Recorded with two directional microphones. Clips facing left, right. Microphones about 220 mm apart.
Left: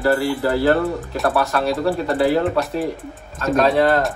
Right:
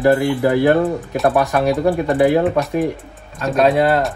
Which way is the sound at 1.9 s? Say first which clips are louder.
Right 3 dB; 15° right (ahead or behind).